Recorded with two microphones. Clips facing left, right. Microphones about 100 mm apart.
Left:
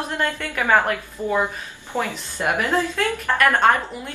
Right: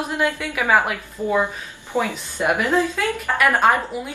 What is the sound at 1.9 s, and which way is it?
Speech, 15° right (ahead or behind).